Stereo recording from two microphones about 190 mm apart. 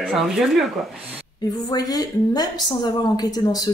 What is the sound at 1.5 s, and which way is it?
A woman's voice, 20° left (ahead or behind).